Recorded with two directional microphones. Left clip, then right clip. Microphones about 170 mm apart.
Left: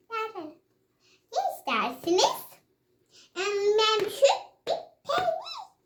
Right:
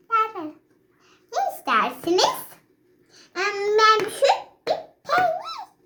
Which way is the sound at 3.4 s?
15° left (ahead or behind).